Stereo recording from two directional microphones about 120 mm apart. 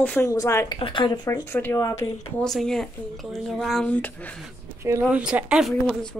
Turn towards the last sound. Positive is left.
turn(degrees=0)  # may be behind; listen again after turning